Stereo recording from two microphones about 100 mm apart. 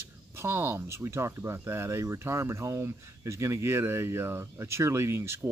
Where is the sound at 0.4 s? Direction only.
25° right (ahead or behind).